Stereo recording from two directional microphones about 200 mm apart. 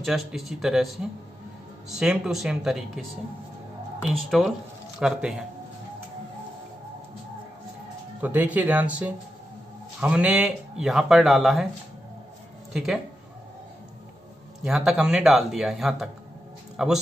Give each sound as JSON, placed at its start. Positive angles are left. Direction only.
{"t": 0.0, "sound": "speech", "side_deg": 0}
{"t": 4.1, "sound": "speech", "side_deg": 0}
{"t": 8.2, "sound": "speech", "side_deg": -10}
{"t": 12.7, "sound": "speech", "side_deg": -5}
{"t": 14.6, "sound": "speech", "side_deg": -5}